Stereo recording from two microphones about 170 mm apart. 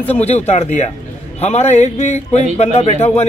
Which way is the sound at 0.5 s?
40° left (ahead or behind).